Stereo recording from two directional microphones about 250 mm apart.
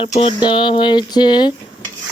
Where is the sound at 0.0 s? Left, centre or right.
Left.